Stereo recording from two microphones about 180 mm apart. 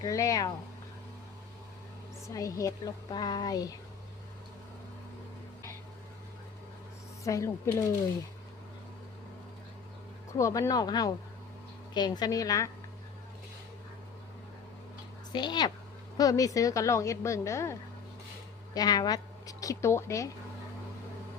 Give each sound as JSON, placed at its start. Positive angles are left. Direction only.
{"t": 0.0, "sound": "speech", "side_deg": 20}
{"t": 2.2, "sound": "speech", "side_deg": 20}
{"t": 7.3, "sound": "a woman's voice", "side_deg": 15}
{"t": 10.3, "sound": "speech", "side_deg": 15}
{"t": 15.3, "sound": "a woman's voice", "side_deg": 25}